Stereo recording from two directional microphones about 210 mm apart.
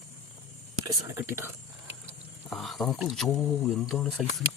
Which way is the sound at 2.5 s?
Centre (ahead or behind).